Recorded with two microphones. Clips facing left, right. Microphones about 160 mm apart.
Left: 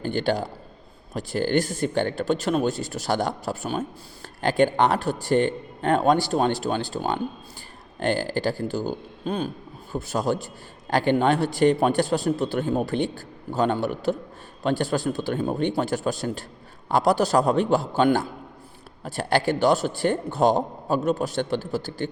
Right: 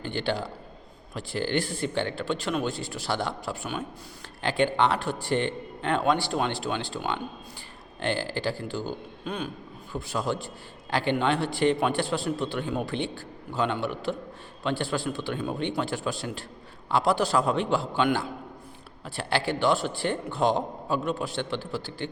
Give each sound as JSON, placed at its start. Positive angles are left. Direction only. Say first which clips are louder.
{"t": 0.0, "sound": "a man's voice", "louder": "left 5 dB", "side_deg": 45}